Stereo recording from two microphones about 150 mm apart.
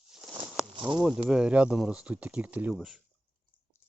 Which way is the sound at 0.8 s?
30° right (ahead or behind).